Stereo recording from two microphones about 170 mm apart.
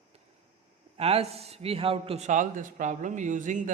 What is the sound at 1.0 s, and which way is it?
A man's voice, 35° right (ahead or behind).